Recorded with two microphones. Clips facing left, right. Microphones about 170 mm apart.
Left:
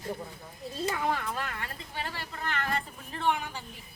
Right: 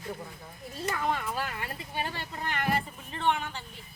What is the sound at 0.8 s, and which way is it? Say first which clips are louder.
Speech: left 1 dB; 15° left (ahead or behind).